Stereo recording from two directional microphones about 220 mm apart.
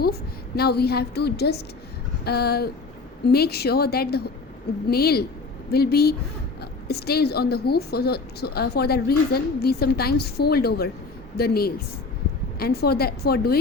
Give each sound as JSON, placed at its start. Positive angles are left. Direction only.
{"t": 0.0, "sound": "a woman's voice", "side_deg": 45}